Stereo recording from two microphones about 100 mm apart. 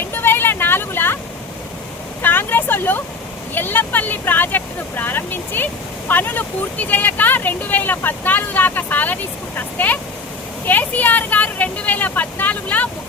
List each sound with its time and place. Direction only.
0.1 s vehicle: 20° left (ahead or behind)
2.2 s a sound: 20° left (ahead or behind)
3.5 s speech: 20° left (ahead or behind)